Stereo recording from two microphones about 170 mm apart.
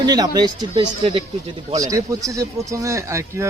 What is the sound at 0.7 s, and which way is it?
Speech, 35° right (ahead or behind).